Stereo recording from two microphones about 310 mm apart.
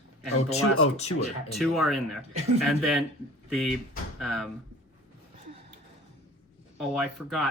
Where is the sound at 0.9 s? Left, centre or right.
Centre.